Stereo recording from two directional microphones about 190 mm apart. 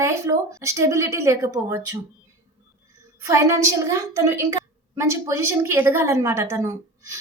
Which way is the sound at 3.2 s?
15° right (ahead or behind).